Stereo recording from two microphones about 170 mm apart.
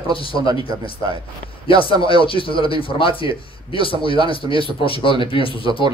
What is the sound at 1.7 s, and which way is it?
Speech, 30° left (ahead or behind).